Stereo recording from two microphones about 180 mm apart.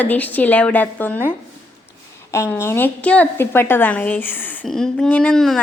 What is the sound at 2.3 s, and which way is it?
A woman's voice, 15° left (ahead or behind).